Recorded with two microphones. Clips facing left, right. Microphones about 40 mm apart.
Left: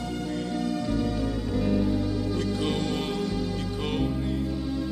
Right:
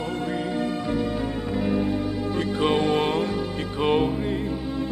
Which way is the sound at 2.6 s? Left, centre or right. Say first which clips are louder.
Right 7 dB; right.